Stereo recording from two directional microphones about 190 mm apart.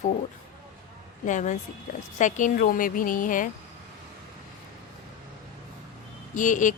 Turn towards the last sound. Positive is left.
turn(degrees=40)  # may be behind; listen again after turning